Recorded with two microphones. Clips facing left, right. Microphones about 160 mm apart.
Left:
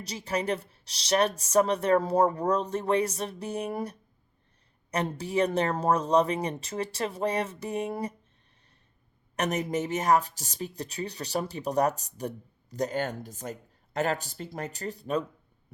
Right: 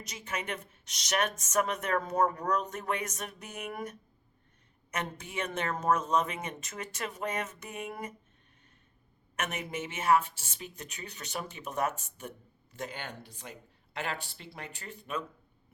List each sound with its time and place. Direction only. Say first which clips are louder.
0.0 s a woman's voice: left 8 dB; 35° left (ahead or behind)
9.3 s a woman's voice: left 8 dB; 40° left (ahead or behind)